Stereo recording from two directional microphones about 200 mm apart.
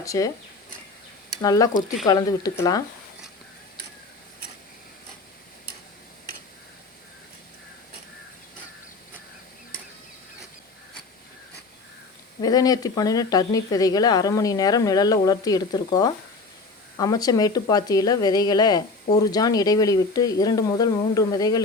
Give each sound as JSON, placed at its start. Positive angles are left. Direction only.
{"t": 0.0, "sound": "speech", "side_deg": 15}
{"t": 1.4, "sound": "speech", "side_deg": 20}
{"t": 12.4, "sound": "speech", "side_deg": 20}